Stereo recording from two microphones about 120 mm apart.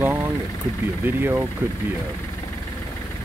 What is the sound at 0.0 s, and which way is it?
Vehicle, 15° right (ahead or behind).